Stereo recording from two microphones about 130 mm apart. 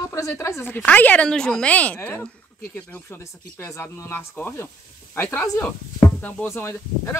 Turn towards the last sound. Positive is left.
turn(degrees=20)  # may be behind; listen again after turning